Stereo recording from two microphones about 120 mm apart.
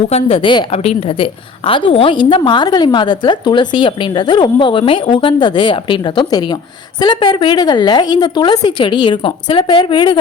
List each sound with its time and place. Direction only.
0.1 s a woman's voice: 50° left (ahead or behind)
0.8 s a woman's voice: 55° left (ahead or behind)